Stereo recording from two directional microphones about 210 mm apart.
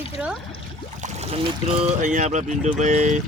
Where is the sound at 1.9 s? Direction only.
35° right (ahead or behind).